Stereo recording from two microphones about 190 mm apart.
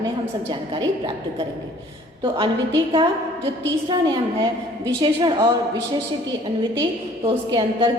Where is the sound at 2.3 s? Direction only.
25° right (ahead or behind).